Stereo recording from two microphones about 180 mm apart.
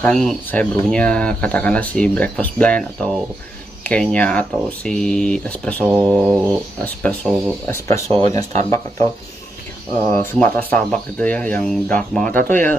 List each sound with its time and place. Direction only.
0.0 s speech: 5° left (ahead or behind)
5.9 s mantra: 5° right (ahead or behind)
6.8 s speech: 10° left (ahead or behind)
10.1 s speech: 10° left (ahead or behind)